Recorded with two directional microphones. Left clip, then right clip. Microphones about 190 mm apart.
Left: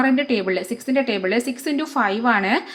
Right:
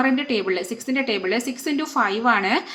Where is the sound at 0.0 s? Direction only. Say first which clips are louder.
Left 2 dB; 25° left (ahead or behind).